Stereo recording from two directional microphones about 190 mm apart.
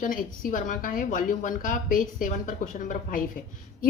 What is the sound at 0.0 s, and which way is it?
A woman's voice, 45° left (ahead or behind).